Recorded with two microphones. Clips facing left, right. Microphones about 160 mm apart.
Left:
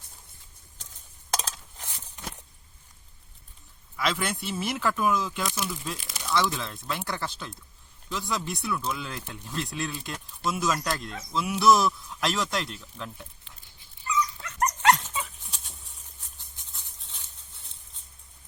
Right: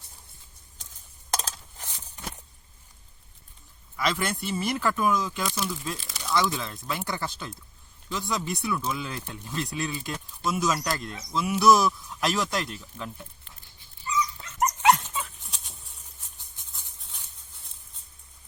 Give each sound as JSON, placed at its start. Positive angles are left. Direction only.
{"t": 1.3, "sound": "a sound", "side_deg": 0}
{"t": 3.9, "sound": "speech", "side_deg": 0}
{"t": 14.1, "sound": "dog", "side_deg": 60}
{"t": 14.8, "sound": "dog", "side_deg": -10}
{"t": 15.1, "sound": "dog", "side_deg": 5}
{"t": 16.7, "sound": "maraca", "side_deg": 0}